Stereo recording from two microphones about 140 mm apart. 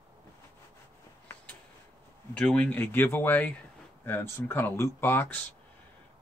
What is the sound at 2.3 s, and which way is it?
Speech, 10° left (ahead or behind).